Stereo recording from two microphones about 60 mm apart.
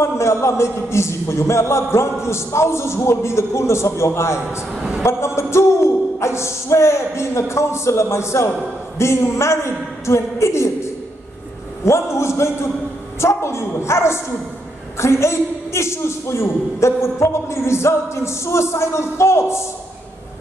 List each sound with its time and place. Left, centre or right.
0.0 s a man's voice: left
4.7 s a woman's voice: centre
5.0 s a man's voice: left